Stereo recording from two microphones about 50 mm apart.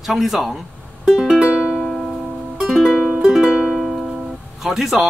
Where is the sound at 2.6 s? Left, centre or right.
Centre.